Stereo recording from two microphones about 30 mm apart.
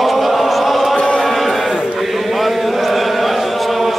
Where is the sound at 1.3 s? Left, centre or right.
Centre.